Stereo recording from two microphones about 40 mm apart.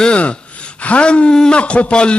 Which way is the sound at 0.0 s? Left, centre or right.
Left.